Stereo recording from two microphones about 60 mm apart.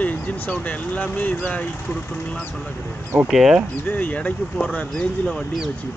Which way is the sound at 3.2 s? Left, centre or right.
Centre.